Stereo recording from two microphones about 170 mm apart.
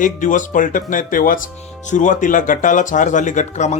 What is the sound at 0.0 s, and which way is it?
Speech, 50° left (ahead or behind).